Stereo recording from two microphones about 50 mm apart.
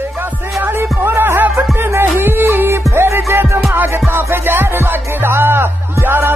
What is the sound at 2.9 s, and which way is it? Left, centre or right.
Music, right.